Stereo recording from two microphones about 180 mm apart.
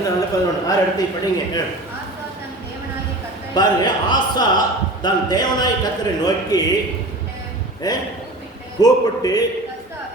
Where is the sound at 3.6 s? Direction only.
25° left (ahead or behind).